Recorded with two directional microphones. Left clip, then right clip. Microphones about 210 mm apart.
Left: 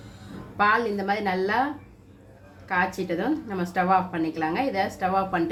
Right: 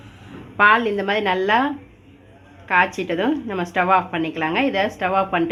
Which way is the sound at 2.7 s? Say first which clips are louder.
Right 7 dB; 25° right (ahead or behind).